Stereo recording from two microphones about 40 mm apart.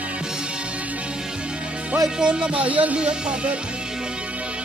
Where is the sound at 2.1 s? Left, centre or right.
Right.